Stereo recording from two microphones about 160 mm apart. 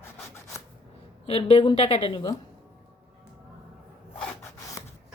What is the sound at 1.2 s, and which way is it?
Speech, 35° left (ahead or behind).